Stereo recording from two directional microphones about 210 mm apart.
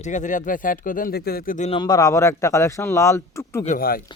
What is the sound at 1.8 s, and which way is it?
A man's voice, 15° left (ahead or behind).